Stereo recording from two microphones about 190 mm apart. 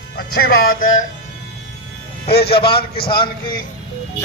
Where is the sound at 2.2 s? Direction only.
55° left (ahead or behind).